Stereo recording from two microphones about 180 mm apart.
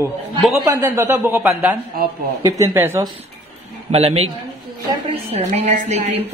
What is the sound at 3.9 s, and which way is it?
A woman's voice, 35° right (ahead or behind).